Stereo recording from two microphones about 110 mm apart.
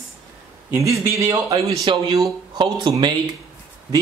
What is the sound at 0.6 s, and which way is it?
Speech, 25° right (ahead or behind).